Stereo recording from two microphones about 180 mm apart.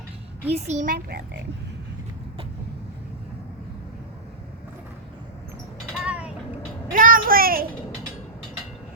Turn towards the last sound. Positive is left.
turn(degrees=-55)  # may be behind; listen again after turning